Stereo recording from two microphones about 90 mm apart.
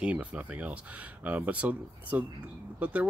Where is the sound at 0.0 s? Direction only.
15° right (ahead or behind).